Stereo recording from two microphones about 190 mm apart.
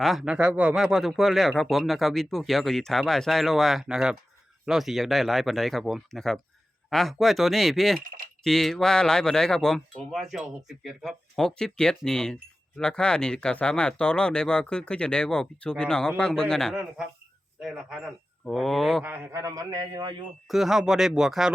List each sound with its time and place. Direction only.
0.0 s speech: centre (ahead or behind)
8.0 s typing: 45° right (ahead or behind)
8.4 s speech: centre (ahead or behind)
19.0 s a man's voice: 10° right (ahead or behind)
20.5 s speech: centre (ahead or behind)